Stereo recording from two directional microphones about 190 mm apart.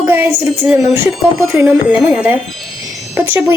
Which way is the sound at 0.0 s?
10° right (ahead or behind).